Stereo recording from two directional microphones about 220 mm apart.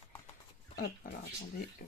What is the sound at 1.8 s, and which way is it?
Speech, 40° left (ahead or behind).